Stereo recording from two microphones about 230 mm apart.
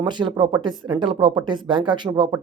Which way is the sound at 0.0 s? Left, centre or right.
Centre.